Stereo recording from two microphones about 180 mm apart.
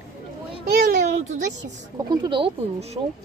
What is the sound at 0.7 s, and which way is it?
Speech, 60° right (ahead or behind).